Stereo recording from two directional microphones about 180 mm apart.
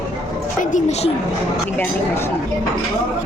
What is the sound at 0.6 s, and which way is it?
Speech, 40° left (ahead or behind).